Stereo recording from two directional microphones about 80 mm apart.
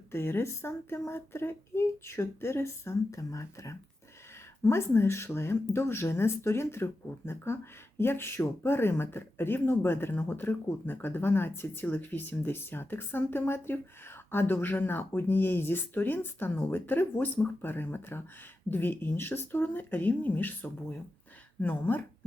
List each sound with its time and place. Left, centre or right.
0.1 s speech: left